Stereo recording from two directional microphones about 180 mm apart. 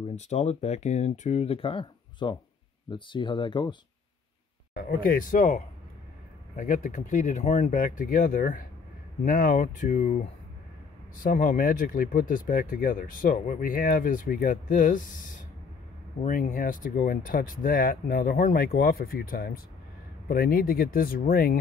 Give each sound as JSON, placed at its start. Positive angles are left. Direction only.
{"t": 0.1, "sound": "speech", "side_deg": 40}
{"t": 4.7, "sound": "speech", "side_deg": 50}